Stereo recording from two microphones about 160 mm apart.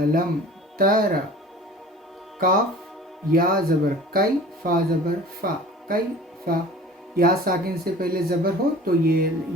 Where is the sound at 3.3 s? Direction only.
65° right (ahead or behind).